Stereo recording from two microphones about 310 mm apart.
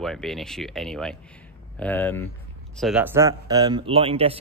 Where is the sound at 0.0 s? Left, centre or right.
Centre.